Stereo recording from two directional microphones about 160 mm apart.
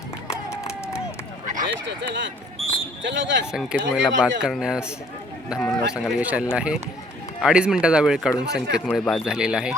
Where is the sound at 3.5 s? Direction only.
5° right (ahead or behind).